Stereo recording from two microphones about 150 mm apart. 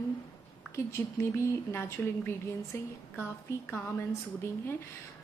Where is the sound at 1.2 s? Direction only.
20° left (ahead or behind).